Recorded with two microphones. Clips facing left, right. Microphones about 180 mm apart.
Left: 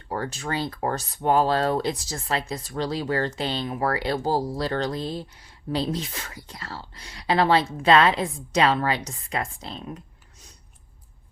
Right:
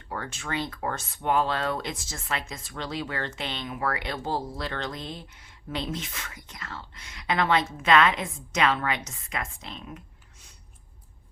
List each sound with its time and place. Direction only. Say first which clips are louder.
0.1 s speech: left 5 dB; 35° left (ahead or behind)